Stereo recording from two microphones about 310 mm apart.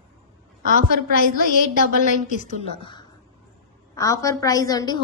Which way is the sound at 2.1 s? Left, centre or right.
Left.